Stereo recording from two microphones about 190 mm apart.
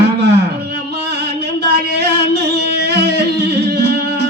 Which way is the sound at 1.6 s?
60° right (ahead or behind).